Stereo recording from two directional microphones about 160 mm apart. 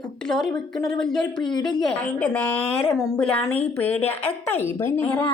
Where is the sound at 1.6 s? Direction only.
5° left (ahead or behind).